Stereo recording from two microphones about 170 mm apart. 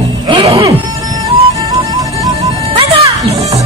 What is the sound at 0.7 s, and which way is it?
Music, 20° right (ahead or behind).